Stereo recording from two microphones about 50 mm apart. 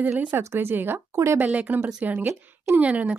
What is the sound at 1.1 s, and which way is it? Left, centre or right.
Speech, right.